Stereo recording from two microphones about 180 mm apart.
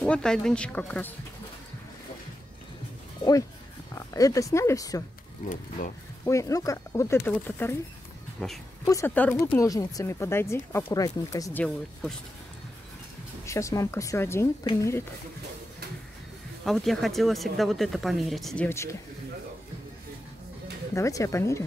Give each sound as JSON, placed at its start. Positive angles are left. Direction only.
{"t": 0.0, "sound": "speech", "side_deg": 5}
{"t": 3.9, "sound": "speech", "side_deg": 20}
{"t": 5.4, "sound": "speech", "side_deg": 45}
{"t": 6.2, "sound": "speech", "side_deg": 15}
{"t": 13.5, "sound": "speech", "side_deg": 15}
{"t": 16.6, "sound": "speech", "side_deg": 0}
{"t": 18.7, "sound": "speech", "side_deg": 15}
{"t": 20.9, "sound": "speech", "side_deg": 15}